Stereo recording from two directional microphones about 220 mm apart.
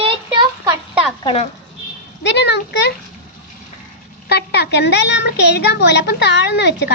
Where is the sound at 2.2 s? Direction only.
50° left (ahead or behind).